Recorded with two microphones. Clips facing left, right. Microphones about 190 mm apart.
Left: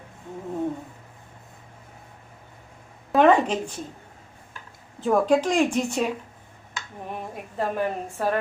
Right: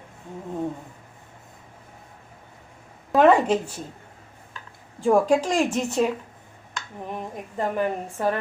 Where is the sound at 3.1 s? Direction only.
5° right (ahead or behind).